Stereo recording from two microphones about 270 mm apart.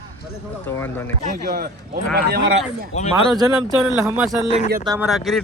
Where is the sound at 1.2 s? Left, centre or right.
Right.